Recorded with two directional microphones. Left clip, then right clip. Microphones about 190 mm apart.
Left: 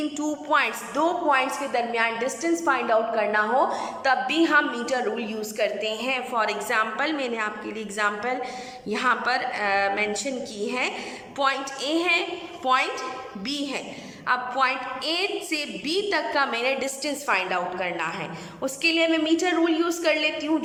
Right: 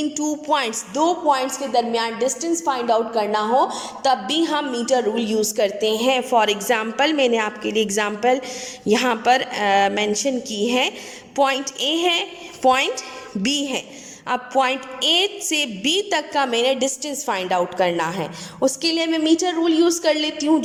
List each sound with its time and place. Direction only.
0.2 s a woman's voice: 30° right (ahead or behind)